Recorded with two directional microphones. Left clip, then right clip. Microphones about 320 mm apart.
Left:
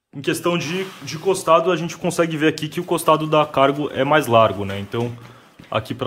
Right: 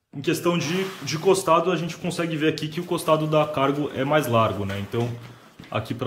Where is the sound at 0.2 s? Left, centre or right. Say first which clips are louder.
Left 3 dB; centre.